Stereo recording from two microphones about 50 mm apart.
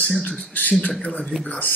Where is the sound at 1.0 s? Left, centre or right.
Left.